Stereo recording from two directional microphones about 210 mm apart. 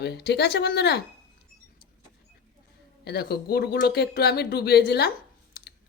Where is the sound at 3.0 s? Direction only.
50° left (ahead or behind).